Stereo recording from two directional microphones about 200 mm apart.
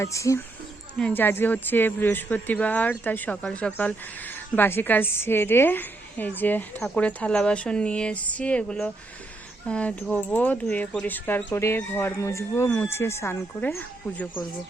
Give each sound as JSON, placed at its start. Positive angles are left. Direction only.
{"t": 0.0, "sound": "speech", "side_deg": 15}